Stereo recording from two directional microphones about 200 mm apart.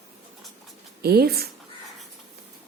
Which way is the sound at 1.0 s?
50° right (ahead or behind).